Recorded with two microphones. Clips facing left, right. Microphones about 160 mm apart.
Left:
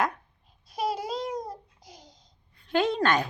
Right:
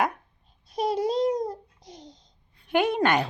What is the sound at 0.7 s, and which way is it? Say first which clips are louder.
Babbling: right 4 dB; 5° left (ahead or behind).